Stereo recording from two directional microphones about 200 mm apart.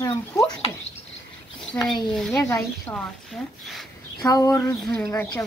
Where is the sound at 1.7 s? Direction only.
5° left (ahead or behind).